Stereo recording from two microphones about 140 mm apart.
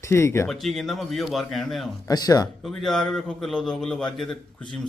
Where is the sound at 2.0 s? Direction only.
25° left (ahead or behind).